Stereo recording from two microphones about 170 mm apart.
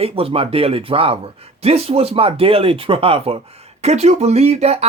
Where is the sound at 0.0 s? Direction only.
35° right (ahead or behind).